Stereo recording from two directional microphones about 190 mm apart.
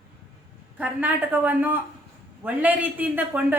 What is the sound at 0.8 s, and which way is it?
A woman's voice, 10° right (ahead or behind).